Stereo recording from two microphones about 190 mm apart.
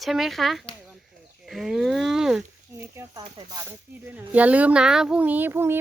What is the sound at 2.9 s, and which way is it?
Speech, 15° right (ahead or behind).